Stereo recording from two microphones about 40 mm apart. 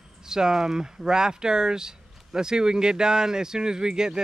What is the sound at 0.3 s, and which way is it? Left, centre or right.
Speech, centre.